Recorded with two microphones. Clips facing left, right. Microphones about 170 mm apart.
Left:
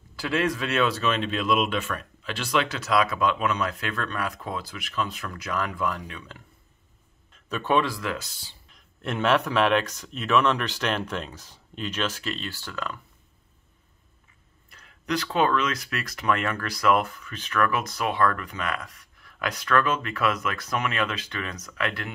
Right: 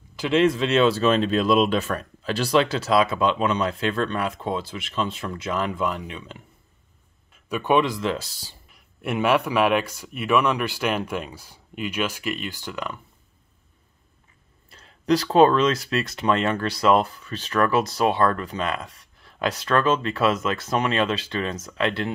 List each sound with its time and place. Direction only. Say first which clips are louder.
0.1 s speech: right 6 dB; 20° right (ahead or behind); by 8.5 s 35° right (ahead or behind)
8.6 s speech: right 3 dB; 10° right (ahead or behind)
14.7 s speech: right 8 dB; 30° right (ahead or behind)